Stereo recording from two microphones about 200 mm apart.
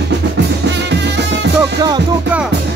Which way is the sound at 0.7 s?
60° right (ahead or behind).